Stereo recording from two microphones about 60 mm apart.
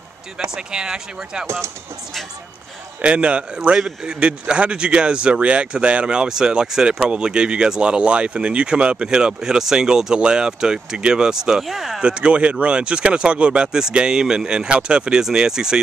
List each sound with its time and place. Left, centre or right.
0.6 s a man's voice: centre
3.0 s a man's voice: centre
12.0 s a man's voice: centre